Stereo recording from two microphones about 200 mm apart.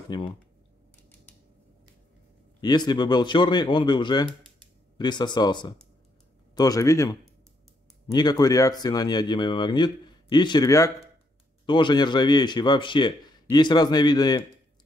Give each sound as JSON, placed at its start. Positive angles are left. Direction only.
{"t": 0.1, "sound": "speech", "side_deg": 20}
{"t": 2.6, "sound": "speech", "side_deg": 20}